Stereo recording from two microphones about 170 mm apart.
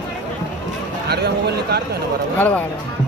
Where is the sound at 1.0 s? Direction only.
70° right (ahead or behind).